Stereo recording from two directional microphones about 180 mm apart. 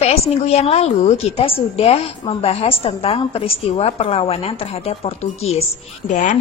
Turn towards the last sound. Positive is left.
turn(degrees=45)  # may be behind; listen again after turning